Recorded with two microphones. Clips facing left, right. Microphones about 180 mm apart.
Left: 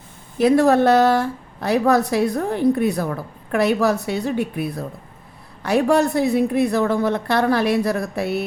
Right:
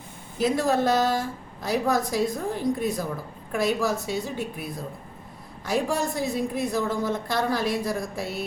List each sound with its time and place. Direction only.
0.3 s a woman's voice: 65° left (ahead or behind)